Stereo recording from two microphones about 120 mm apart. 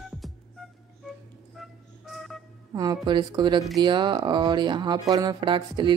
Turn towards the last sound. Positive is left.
turn(degrees=-45)  # may be behind; listen again after turning